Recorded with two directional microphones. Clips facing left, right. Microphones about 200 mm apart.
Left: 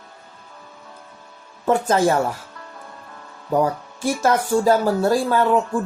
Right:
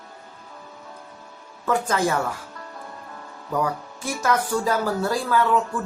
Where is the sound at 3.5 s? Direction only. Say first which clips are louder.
Left 5 dB; 30° left (ahead or behind).